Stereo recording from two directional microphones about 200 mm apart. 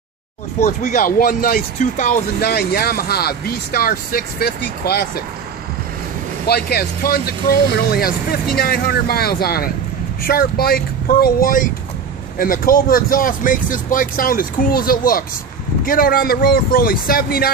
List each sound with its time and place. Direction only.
0.7 s speech: 40° left (ahead or behind)
6.4 s speech: 50° left (ahead or behind)